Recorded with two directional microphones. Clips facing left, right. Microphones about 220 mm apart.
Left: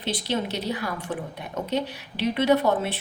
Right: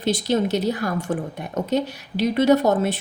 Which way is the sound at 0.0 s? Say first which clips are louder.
Right 7 dB; 45° right (ahead or behind).